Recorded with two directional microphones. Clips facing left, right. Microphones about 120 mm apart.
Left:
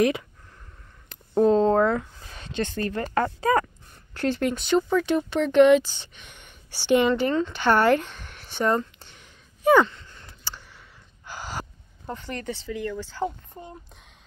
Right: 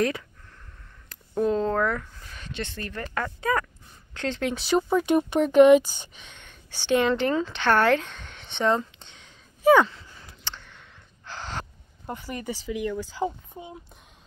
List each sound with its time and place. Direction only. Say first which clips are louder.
1.0 s speech: left 5 dB; 30° left (ahead or behind)
3.3 s a sound: left 3 dB; 35° left (ahead or behind)
4.1 s speech: left 3 dB; 10° left (ahead or behind)
4.9 s speech: right 1 dB; 15° right (ahead or behind)
6.3 s a sound: even; 10° left (ahead or behind)
7.1 s speech: left 1 dB; centre (ahead or behind)
7.6 s speech: left 1 dB; 10° left (ahead or behind)
9.6 s gasp: even; centre (ahead or behind)
10.4 s a sound: even; 10° left (ahead or behind)
11.2 s gasp: left 1 dB; 10° left (ahead or behind)
12.1 s speech: even; 10° right (ahead or behind)
13.5 s a sound: right 1 dB; 5° right (ahead or behind)